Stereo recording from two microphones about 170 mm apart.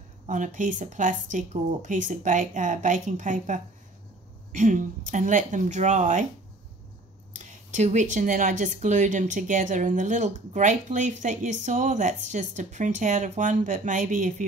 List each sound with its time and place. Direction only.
0.3 s speech: 50° right (ahead or behind)
7.3 s speech: 45° right (ahead or behind)